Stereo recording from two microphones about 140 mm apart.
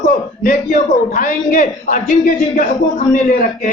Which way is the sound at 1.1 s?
70° left (ahead or behind).